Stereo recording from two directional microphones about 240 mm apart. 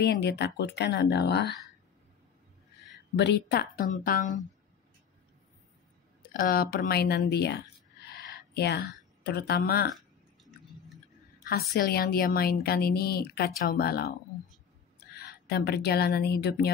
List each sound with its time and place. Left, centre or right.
0.0 s speech: left
3.2 s a woman's voice: left
6.3 s a woman's voice: left
8.1 s a sound: left
9.9 s burping: centre
11.4 s a woman's voice: left
15.1 s a woman's voice: left